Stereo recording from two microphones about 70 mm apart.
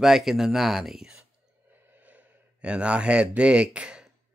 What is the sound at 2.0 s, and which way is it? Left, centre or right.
Speech, centre.